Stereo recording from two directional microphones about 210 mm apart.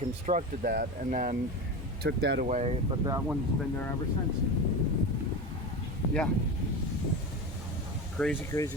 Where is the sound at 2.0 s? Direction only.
50° right (ahead or behind).